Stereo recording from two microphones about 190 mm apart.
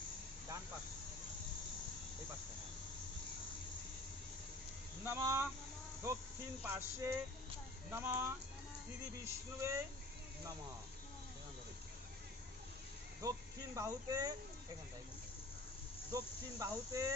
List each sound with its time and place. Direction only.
5.0 s speech: 15° right (ahead or behind)
6.6 s insect: 15° right (ahead or behind)
13.7 s speech: 20° right (ahead or behind)
16.1 s insect: 15° right (ahead or behind)